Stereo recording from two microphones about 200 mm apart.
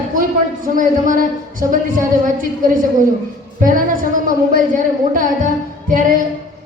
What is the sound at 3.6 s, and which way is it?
A woman's voice, 40° right (ahead or behind).